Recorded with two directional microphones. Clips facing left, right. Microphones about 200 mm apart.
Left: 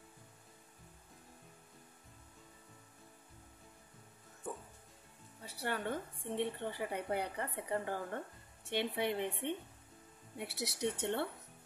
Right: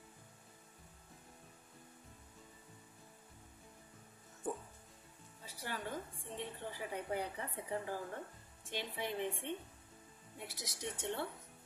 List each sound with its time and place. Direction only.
5.4 s a woman's voice: 65° left (ahead or behind)